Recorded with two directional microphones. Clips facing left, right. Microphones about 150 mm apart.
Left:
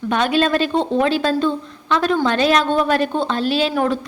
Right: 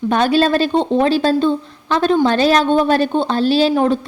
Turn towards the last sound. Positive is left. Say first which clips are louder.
# right 4 dB
turn(degrees=-30)  # may be behind; listen again after turning